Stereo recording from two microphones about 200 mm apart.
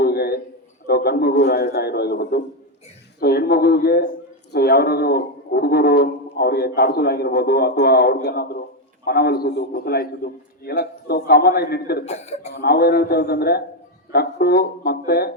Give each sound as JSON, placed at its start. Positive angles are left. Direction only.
{"t": 0.0, "sound": "a sound", "side_deg": 50}
{"t": 0.9, "sound": "a man's voice", "side_deg": 50}
{"t": 12.0, "sound": "speech", "side_deg": 35}
{"t": 12.5, "sound": "a man's voice", "side_deg": 50}